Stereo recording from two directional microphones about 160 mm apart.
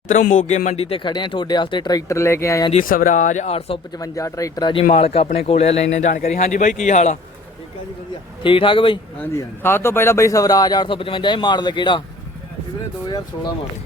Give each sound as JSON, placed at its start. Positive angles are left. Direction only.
{"t": 0.1, "sound": "a man's voice", "side_deg": 50}
{"t": 2.7, "sound": "speech", "side_deg": 60}
{"t": 3.9, "sound": "a man's voice", "side_deg": 20}
{"t": 8.4, "sound": "speech", "side_deg": 30}
{"t": 9.1, "sound": "a man's voice", "side_deg": 15}
{"t": 13.1, "sound": "a man's voice", "side_deg": 25}